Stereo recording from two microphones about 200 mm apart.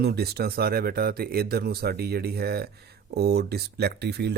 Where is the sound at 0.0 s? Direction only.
55° right (ahead or behind).